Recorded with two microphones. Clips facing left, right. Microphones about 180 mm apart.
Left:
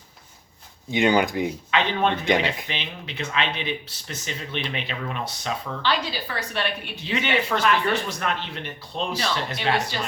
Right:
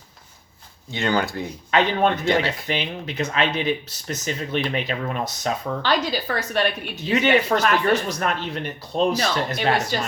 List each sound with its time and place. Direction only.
0.9 s speech: 15° left (ahead or behind)
1.7 s speech: 45° right (ahead or behind)